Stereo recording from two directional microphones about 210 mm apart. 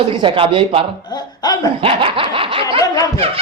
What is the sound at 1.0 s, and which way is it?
Speech, 20° left (ahead or behind).